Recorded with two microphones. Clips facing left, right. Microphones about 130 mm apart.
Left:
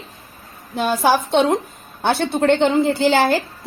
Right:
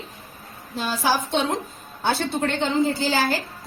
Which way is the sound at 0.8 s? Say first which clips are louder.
Left 6 dB; 55° left (ahead or behind).